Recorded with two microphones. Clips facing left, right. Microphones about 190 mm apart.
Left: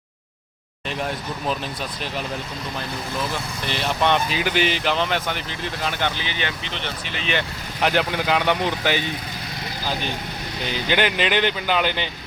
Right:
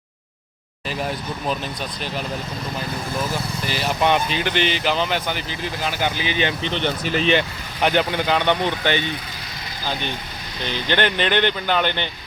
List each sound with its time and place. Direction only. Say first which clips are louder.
3.7 s speech: right 1 dB; 5° right (ahead or behind)
4.4 s speech: even; 5° left (ahead or behind); by 6.5 s 15° right (ahead or behind)
6.8 s speech: right 11 dB; 40° right (ahead or behind)
7.8 s speech: right 2 dB; centre (ahead or behind)
10.7 s speech: right 1 dB; 10° left (ahead or behind)